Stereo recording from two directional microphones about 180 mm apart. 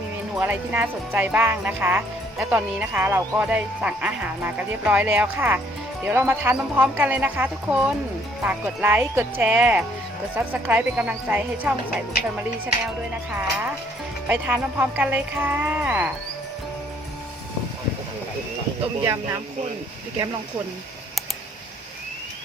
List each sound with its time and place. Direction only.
0.3 s speech: 10° right (ahead or behind)
13.3 s speech: 10° right (ahead or behind)
19.0 s speech: 15° right (ahead or behind)